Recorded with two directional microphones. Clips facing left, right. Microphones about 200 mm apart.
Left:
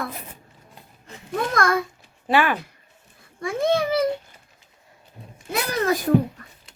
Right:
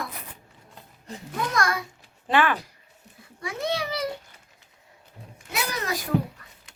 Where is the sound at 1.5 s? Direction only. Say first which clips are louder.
Left 4 dB; 50° left (ahead or behind).